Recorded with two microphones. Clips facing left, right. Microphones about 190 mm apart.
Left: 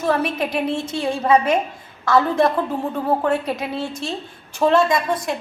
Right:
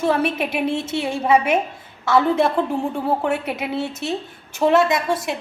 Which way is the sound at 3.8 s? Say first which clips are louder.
Right 2 dB; 25° right (ahead or behind).